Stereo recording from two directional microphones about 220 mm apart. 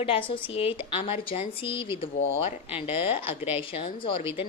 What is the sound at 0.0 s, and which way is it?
A woman's voice, 25° left (ahead or behind).